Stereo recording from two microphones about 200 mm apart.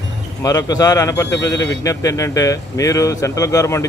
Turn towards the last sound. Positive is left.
turn(degrees=15)  # may be behind; listen again after turning